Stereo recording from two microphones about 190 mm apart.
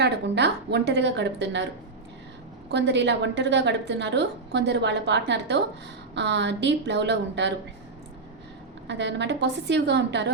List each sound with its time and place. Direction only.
0.0 s a woman's voice: 65° right (ahead or behind)
2.6 s a woman's voice: 65° right (ahead or behind)
8.9 s a woman's voice: 65° right (ahead or behind)